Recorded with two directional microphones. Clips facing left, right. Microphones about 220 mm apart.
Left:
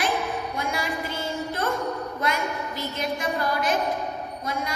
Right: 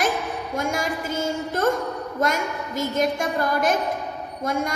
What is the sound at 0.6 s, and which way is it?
A woman's voice, 45° right (ahead or behind).